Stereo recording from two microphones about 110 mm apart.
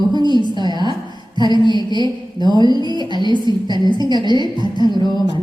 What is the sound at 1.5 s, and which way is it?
A woman's voice, 45° right (ahead or behind).